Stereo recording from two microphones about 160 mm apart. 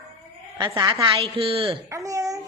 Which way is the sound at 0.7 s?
20° right (ahead or behind).